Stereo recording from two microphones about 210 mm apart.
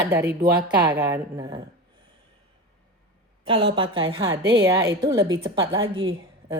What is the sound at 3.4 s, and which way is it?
A woman's voice, 25° right (ahead or behind).